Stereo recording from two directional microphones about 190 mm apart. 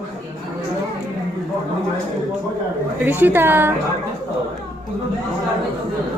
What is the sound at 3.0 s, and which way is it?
Speech, 10° right (ahead or behind).